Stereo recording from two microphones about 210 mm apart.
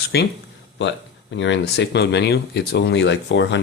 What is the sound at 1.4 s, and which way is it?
Speech, 55° left (ahead or behind).